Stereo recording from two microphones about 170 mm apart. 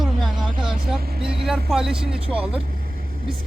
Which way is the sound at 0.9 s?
65° right (ahead or behind).